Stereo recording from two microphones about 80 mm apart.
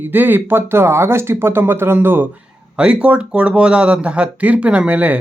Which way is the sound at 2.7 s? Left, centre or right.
Centre.